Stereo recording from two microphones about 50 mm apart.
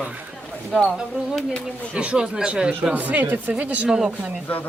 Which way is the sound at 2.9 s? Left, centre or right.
Right.